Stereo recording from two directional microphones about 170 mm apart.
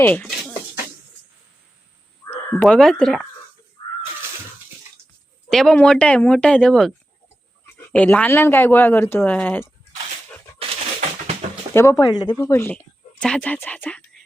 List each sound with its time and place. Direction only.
0.0 s a sound: 10° left (ahead or behind)
2.5 s speech: 5° left (ahead or behind)
5.5 s speech: 5° left (ahead or behind)
7.9 s speech: 10° left (ahead or behind)
11.7 s speech: 15° left (ahead or behind)
12.4 s speech: 15° left (ahead or behind)